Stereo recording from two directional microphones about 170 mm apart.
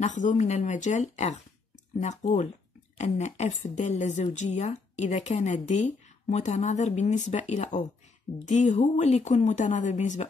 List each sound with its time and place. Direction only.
0.0 s a woman's voice: 45° left (ahead or behind)